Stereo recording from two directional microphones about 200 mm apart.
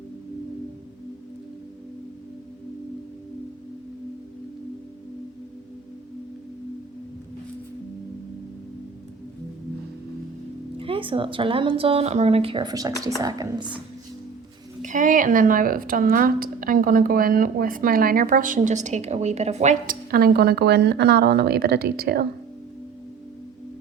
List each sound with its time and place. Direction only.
10.8 s speech: 25° right (ahead or behind)
14.8 s a woman's voice: 40° right (ahead or behind)